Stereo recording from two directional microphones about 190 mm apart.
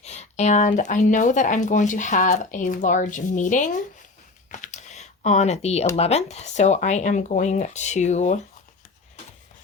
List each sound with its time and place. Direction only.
0.0 s speech: 35° left (ahead or behind)
4.5 s typing: 40° left (ahead or behind)
6.0 s speech: 35° left (ahead or behind)